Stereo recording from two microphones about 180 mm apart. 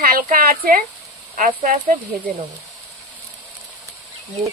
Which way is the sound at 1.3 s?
45° right (ahead or behind).